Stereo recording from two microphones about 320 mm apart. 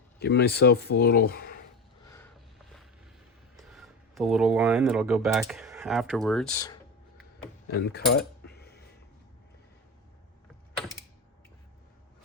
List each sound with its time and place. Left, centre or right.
0.2 s speech: left
3.6 s speech: centre
7.7 s cutlery: left